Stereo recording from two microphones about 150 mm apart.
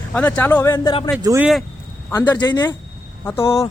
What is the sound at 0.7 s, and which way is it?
Speech, 35° left (ahead or behind).